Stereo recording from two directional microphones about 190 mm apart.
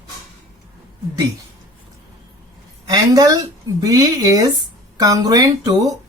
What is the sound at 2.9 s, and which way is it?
Speech, 20° right (ahead or behind).